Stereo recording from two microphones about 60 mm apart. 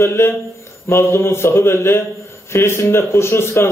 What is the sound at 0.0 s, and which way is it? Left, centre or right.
A man's voice, left.